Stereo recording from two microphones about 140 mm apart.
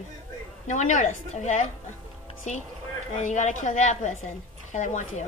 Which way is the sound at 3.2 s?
60° left (ahead or behind).